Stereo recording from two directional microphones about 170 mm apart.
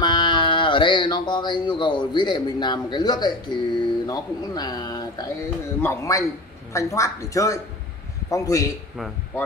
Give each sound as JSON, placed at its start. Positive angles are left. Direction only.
{"t": 0.0, "sound": "speech", "side_deg": 25}